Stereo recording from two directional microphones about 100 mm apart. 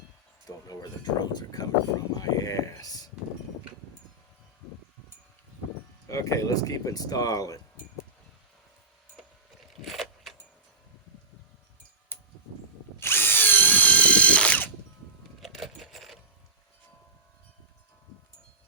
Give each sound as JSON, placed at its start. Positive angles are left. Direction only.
{"t": 0.4, "sound": "speech", "side_deg": 40}
{"t": 6.1, "sound": "speech", "side_deg": 35}
{"t": 9.8, "sound": "keys jangling", "side_deg": 0}
{"t": 13.0, "sound": "drill", "side_deg": 25}
{"t": 15.4, "sound": "coin", "side_deg": 0}